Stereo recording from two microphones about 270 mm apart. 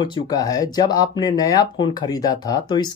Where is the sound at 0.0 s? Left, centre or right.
Centre.